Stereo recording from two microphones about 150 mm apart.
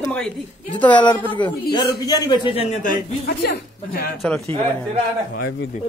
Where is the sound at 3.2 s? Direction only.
90° left.